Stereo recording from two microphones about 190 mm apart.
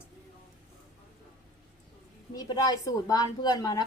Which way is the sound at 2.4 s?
20° left (ahead or behind).